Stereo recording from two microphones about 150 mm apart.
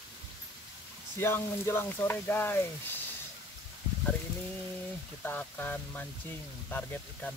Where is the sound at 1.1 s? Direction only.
15° left (ahead or behind).